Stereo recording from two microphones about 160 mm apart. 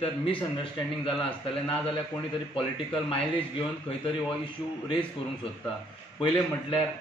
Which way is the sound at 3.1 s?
35° left (ahead or behind).